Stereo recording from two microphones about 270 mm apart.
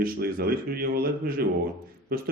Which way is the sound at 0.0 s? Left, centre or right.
Right.